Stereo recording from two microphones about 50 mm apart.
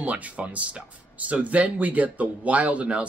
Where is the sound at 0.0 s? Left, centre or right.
Right.